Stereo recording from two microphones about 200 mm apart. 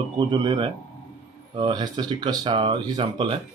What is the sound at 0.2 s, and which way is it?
Speech, 25° right (ahead or behind).